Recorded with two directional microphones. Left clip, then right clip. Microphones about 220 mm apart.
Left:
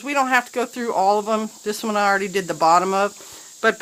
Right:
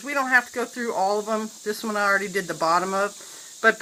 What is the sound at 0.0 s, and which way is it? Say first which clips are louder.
Speech: left 2 dB; 45° left (ahead or behind).